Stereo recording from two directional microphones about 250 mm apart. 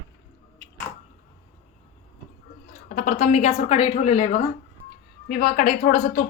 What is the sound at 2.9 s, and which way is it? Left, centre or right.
Speech, left.